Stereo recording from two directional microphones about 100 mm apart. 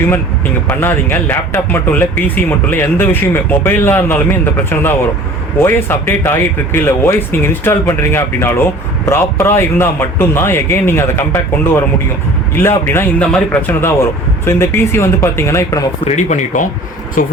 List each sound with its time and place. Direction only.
0.7 s speech: 20° left (ahead or behind)